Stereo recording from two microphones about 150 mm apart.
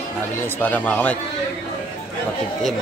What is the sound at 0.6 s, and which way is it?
Speech, 10° left (ahead or behind).